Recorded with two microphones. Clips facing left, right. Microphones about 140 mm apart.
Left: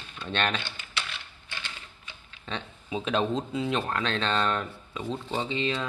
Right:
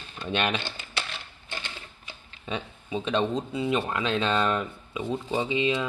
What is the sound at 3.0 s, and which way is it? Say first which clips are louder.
Speech: right 1 dB; centre (ahead or behind).